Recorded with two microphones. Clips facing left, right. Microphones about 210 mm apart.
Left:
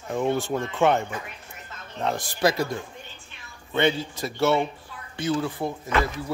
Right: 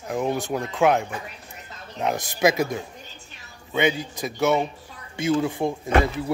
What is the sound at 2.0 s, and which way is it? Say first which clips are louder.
Speech: right 2 dB; 15° right (ahead or behind).